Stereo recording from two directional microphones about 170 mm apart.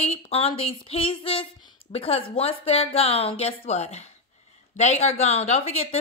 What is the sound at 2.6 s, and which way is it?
A woman's voice, 35° left (ahead or behind).